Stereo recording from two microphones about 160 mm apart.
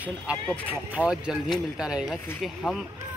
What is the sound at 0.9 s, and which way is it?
Speech, 5° right (ahead or behind).